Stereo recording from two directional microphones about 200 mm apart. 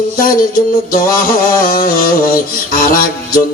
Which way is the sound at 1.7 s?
45° left (ahead or behind).